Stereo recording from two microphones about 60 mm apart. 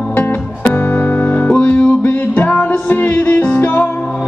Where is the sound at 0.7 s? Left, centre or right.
Left.